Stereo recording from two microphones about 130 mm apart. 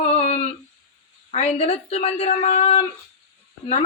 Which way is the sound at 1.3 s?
60° left (ahead or behind).